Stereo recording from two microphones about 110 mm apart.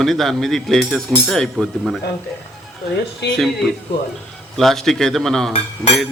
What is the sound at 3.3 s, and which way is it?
A man's voice, 5° left (ahead or behind).